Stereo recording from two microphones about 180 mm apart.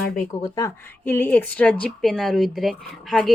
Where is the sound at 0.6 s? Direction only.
15° left (ahead or behind).